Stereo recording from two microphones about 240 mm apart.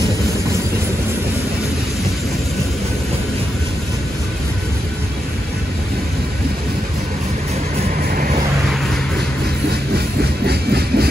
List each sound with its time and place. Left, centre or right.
8.1 s vehicle: right
10.4 s engine: right